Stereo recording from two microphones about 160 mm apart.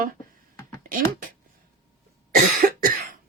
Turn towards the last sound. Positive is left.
turn(degrees=-65)  # may be behind; listen again after turning